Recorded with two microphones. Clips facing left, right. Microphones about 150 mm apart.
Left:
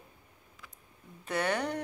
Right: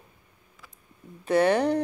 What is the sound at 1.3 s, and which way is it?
Speech, 35° right (ahead or behind).